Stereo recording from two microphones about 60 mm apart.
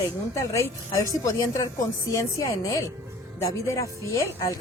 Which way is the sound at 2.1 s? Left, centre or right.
Left.